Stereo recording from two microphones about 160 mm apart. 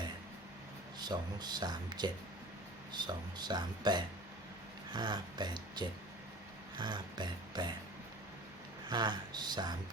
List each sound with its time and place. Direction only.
0.9 s speech: 25° right (ahead or behind)
8.9 s speech: 25° right (ahead or behind)